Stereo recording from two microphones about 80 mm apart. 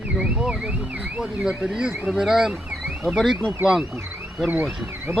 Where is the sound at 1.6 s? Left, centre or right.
Centre.